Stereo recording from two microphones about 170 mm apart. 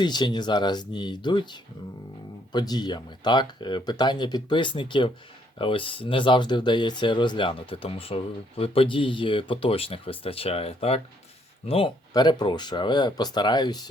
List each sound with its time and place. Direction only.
0.0 s speech: 25° left (ahead or behind)